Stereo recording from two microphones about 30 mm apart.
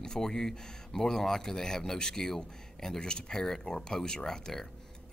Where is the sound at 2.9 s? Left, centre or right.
Left.